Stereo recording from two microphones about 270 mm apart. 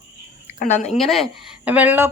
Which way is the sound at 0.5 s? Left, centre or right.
Left.